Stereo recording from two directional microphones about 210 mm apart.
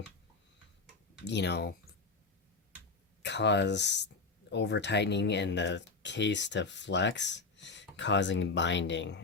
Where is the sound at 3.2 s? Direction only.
55° left (ahead or behind).